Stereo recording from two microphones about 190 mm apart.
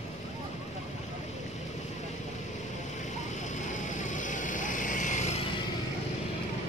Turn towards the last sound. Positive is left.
turn(degrees=40)  # may be behind; listen again after turning